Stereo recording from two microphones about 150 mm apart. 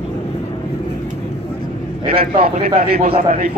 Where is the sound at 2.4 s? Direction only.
85° right.